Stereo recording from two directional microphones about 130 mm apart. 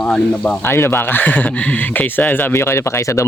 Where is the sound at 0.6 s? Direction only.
20° left (ahead or behind).